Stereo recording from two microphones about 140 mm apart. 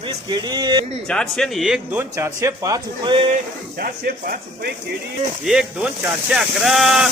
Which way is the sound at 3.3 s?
90° right.